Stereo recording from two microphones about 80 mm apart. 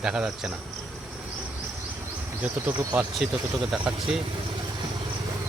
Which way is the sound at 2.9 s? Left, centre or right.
Centre.